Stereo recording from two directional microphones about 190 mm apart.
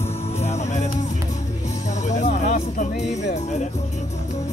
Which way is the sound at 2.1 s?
40° left (ahead or behind).